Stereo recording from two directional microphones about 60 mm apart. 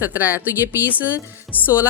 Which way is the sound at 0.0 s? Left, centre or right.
Right.